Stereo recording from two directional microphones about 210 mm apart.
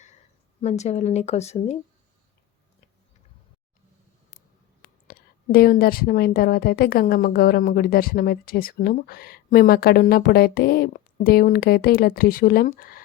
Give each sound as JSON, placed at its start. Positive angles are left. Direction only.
{"t": 0.6, "sound": "a woman's voice", "side_deg": 30}
{"t": 5.0, "sound": "a woman's voice", "side_deg": 45}